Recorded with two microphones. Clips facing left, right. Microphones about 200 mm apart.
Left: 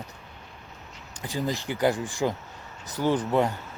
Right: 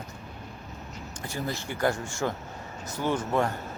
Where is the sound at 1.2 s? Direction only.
15° left (ahead or behind).